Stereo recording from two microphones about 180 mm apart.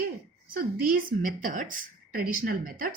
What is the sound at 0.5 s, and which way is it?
A woman's voice, 50° right (ahead or behind).